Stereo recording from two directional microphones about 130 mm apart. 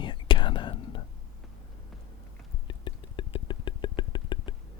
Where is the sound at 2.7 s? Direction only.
35° left (ahead or behind).